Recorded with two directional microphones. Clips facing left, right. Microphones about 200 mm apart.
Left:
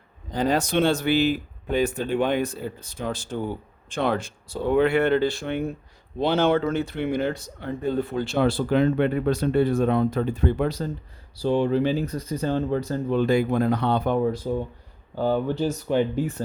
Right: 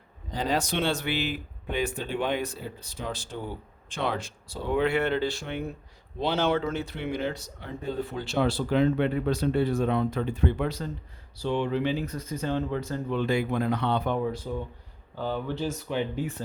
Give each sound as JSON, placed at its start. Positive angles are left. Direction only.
{"t": 0.3, "sound": "speech", "side_deg": 50}